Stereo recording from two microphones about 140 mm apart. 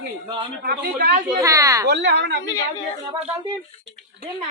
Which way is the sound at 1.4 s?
25° right (ahead or behind).